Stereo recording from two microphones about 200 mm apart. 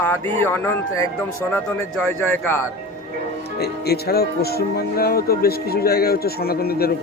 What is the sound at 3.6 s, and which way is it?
Music, 55° left (ahead or behind).